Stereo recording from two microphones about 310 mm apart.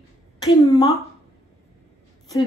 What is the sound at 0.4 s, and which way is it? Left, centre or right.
Speech, centre.